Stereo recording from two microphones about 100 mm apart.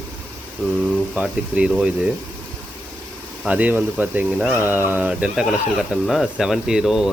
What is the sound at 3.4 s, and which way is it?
Speech, 15° right (ahead or behind).